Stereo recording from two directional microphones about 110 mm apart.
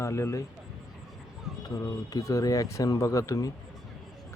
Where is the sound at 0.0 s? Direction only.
25° left (ahead or behind).